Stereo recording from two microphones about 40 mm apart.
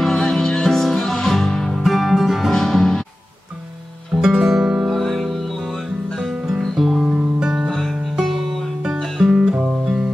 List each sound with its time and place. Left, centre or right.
0.0 s music: centre
4.2 s music: centre
5.0 s music: centre
6.6 s guitar: centre
7.1 s music: right
9.2 s music: centre